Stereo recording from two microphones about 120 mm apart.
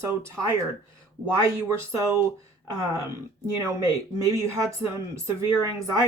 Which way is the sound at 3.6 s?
25° right (ahead or behind).